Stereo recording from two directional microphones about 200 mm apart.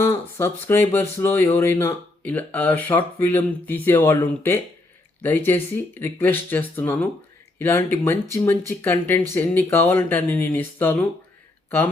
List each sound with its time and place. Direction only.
0.0 s speech: 10° left (ahead or behind)